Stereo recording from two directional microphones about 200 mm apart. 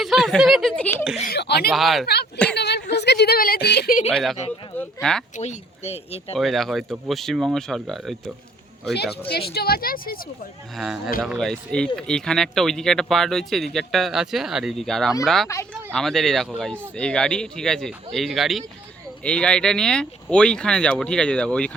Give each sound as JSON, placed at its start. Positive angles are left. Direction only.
{"t": 0.0, "sound": "speech", "side_deg": 0}
{"t": 1.3, "sound": "a sound", "side_deg": 55}
{"t": 1.7, "sound": "speech", "side_deg": 0}
{"t": 2.6, "sound": "a sound", "side_deg": 55}
{"t": 2.9, "sound": "a woman's voice", "side_deg": 55}
{"t": 4.1, "sound": "speech", "side_deg": 0}
{"t": 5.4, "sound": "speech", "side_deg": 35}
{"t": 6.3, "sound": "speech", "side_deg": 0}
{"t": 9.3, "sound": "speech", "side_deg": 50}
{"t": 10.8, "sound": "speech", "side_deg": 0}
{"t": 15.4, "sound": "speech", "side_deg": 15}
{"t": 16.0, "sound": "speech", "side_deg": 0}